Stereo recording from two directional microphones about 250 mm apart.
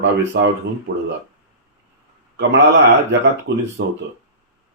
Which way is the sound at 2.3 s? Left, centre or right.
Right.